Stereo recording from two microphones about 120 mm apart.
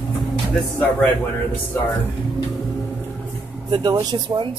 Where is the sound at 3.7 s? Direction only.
35° right (ahead or behind).